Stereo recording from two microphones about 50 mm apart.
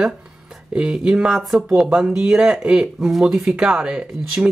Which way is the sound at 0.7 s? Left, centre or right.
Centre.